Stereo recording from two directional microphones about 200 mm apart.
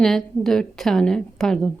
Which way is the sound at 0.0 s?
Centre (ahead or behind).